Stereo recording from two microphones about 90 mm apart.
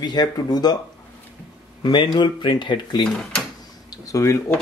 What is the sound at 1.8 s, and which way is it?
Speech, 55° left (ahead or behind).